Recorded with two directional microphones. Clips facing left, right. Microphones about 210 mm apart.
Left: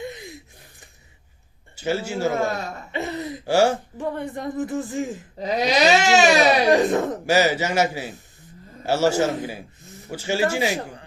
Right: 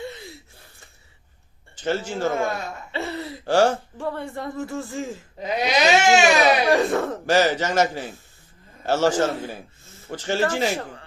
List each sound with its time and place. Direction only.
0.0 s a sound: 15° left (ahead or behind)
1.7 s a man's voice: 10° left (ahead or behind)
2.5 s speech: 35° left (ahead or behind)
2.9 s speech: 20° left (ahead or behind)
5.4 s baby cry: 35° left (ahead or behind)
6.7 s a man's voice: 20° left (ahead or behind)